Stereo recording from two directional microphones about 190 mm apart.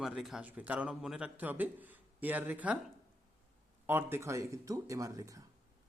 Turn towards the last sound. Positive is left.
turn(degrees=-15)  # may be behind; listen again after turning